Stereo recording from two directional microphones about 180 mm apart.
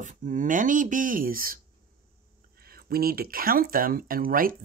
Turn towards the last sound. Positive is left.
turn(degrees=-50)  # may be behind; listen again after turning